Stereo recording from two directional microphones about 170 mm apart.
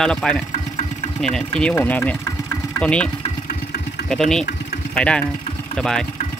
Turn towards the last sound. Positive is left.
turn(degrees=5)  # may be behind; listen again after turning